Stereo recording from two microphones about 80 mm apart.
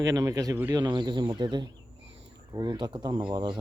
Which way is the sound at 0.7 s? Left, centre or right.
Right.